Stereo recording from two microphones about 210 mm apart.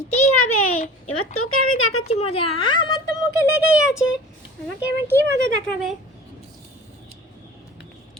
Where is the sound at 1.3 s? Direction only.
85° left.